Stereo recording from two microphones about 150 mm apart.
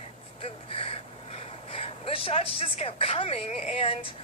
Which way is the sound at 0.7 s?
40° left (ahead or behind).